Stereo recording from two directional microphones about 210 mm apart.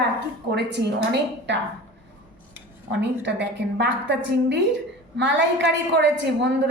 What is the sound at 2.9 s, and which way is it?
A woman's voice, 55° right (ahead or behind).